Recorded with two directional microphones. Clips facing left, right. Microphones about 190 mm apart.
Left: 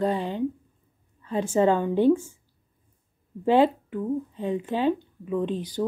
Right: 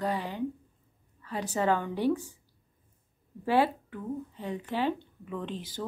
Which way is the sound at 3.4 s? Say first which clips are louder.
Left 6 dB; 20° left (ahead or behind).